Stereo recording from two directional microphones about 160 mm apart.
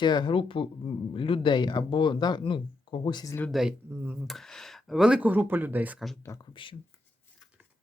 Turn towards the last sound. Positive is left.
turn(degrees=20)  # may be behind; listen again after turning